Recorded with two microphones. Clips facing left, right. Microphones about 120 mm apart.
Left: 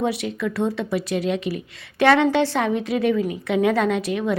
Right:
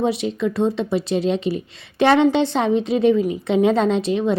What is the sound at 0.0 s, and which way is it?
A woman's voice, 25° right (ahead or behind).